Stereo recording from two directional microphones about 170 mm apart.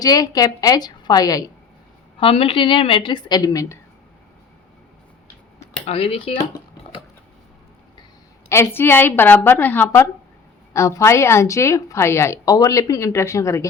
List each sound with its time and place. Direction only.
0.0 s a woman's voice: 20° left (ahead or behind)
2.1 s a woman's voice: 35° left (ahead or behind)
5.8 s speech: 35° left (ahead or behind)
8.4 s a woman's voice: 15° left (ahead or behind)